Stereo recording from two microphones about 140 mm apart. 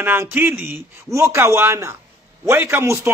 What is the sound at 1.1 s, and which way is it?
A man's voice, 20° right (ahead or behind).